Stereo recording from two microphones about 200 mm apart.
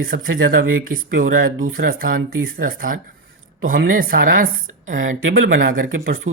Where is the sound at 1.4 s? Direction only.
90° right.